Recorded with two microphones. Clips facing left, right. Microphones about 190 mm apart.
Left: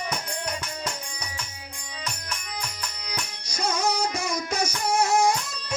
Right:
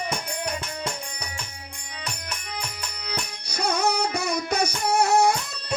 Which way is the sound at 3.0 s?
60° right (ahead or behind).